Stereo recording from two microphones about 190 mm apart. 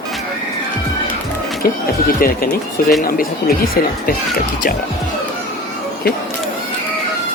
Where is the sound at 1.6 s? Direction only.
50° left (ahead or behind).